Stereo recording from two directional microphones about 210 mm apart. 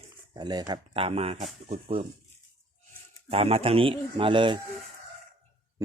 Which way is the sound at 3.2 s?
30° right (ahead or behind).